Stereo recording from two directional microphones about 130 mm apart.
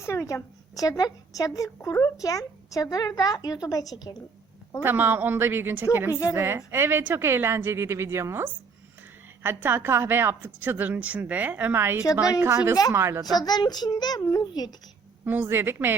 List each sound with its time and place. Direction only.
0.0 s a woman's voice: 20° left (ahead or behind)
4.8 s a woman's voice: 15° right (ahead or behind)
6.1 s a woman's voice: 25° left (ahead or behind)
6.3 s a woman's voice: 20° right (ahead or behind)
13.3 s a child's voice: 30° left (ahead or behind)
15.2 s a woman's voice: 15° right (ahead or behind)